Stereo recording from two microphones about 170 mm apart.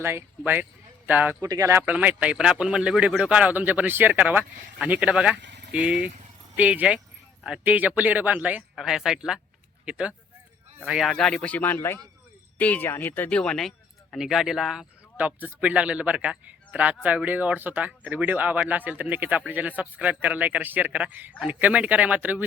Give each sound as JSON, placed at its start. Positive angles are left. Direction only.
{"t": 0.0, "sound": "speech", "side_deg": -15}
{"t": 1.8, "sound": "a man's voice", "side_deg": -10}